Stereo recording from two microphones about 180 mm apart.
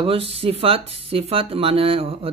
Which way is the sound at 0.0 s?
30° right (ahead or behind).